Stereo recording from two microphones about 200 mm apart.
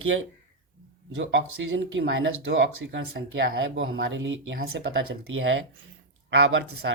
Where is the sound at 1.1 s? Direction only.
70° right (ahead or behind).